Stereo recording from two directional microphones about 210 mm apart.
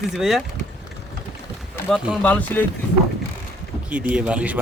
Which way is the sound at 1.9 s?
5° left (ahead or behind).